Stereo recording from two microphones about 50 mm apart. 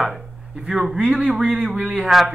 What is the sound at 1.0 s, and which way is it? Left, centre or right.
Speech, right.